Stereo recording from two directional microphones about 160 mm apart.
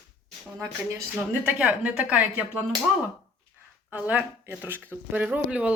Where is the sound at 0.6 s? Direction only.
15° right (ahead or behind).